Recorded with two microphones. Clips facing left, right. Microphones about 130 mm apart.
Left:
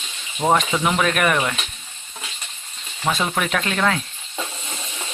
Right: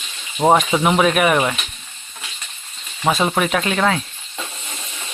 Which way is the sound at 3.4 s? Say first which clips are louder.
Right 4 dB; 5° right (ahead or behind).